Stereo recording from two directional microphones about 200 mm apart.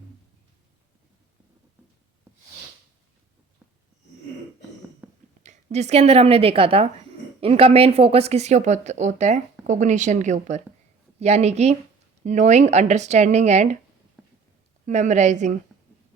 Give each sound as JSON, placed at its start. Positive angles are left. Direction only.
{"t": 5.0, "sound": "a sound", "side_deg": -10}
{"t": 5.4, "sound": "a woman's voice", "side_deg": -35}
{"t": 14.8, "sound": "a woman's voice", "side_deg": -35}